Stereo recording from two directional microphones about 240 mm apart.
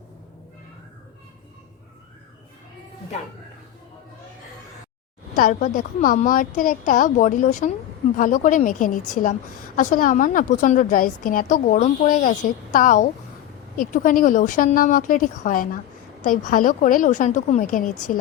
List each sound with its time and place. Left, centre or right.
5.4 s a woman's voice: left